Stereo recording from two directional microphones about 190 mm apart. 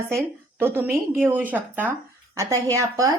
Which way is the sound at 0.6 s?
10° right (ahead or behind).